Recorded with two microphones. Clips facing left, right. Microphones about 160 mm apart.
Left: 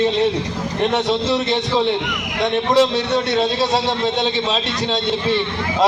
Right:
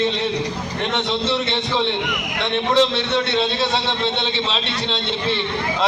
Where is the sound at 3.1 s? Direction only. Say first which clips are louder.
Left 3 dB; 40° left (ahead or behind).